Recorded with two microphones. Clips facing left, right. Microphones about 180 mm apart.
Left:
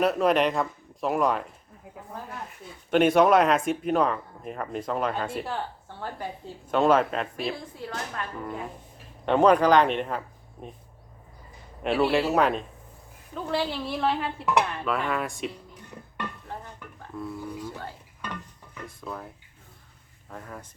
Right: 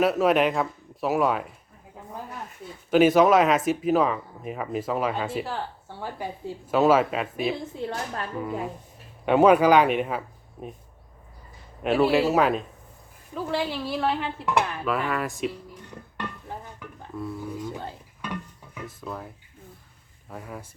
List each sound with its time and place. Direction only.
0.0 s speech: centre (ahead or behind)
2.9 s speech: centre (ahead or behind)
7.6 s a woman's voice: 25° right (ahead or behind)
8.4 s speech: 5° right (ahead or behind)
11.8 s speech: 5° right (ahead or behind)
16.8 s a sound: centre (ahead or behind)
17.7 s music: 20° right (ahead or behind)
18.2 s music: 10° right (ahead or behind)
20.3 s speech: 10° right (ahead or behind)